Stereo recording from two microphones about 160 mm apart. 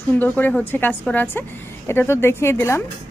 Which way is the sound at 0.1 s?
10° left (ahead or behind).